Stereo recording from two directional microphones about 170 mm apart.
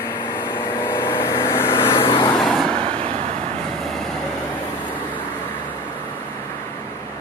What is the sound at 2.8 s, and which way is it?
Vehicle, 35° right (ahead or behind).